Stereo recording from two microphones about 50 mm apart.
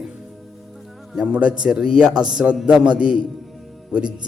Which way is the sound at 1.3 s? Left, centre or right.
Right.